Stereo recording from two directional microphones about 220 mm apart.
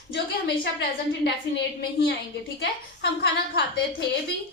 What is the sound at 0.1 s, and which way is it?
A woman's voice, 50° left (ahead or behind).